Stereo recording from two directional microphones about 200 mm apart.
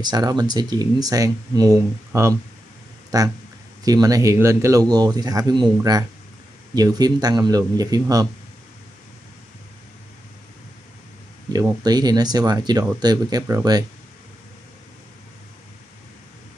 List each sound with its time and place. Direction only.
0.0 s speech: 20° right (ahead or behind)
11.5 s speech: 20° right (ahead or behind)